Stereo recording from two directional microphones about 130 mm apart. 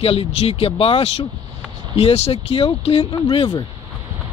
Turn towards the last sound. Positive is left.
turn(degrees=40)  # may be behind; listen again after turning